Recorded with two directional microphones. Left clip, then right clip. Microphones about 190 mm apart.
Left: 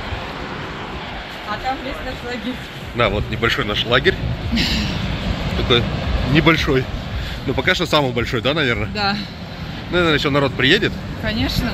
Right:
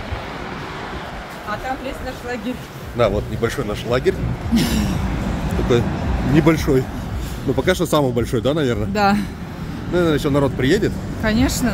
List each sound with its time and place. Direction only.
3.0 s speech: 15° right (ahead or behind)
4.6 s a sound: 70° right (ahead or behind)
5.7 s speech: 15° right (ahead or behind)
8.9 s a sound: 70° right (ahead or behind)
9.9 s speech: 20° right (ahead or behind)
11.2 s speech: 90° right